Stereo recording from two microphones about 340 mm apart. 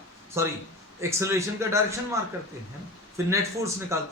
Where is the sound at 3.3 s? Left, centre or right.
Centre.